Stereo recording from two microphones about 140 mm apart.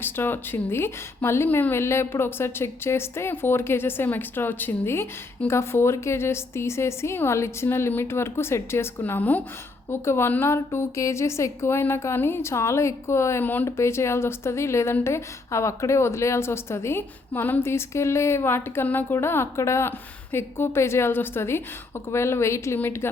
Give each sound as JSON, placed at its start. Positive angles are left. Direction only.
{"t": 0.0, "sound": "a woman's voice", "side_deg": 15}